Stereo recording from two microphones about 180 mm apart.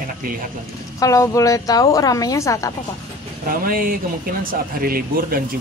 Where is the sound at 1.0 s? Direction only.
20° left (ahead or behind).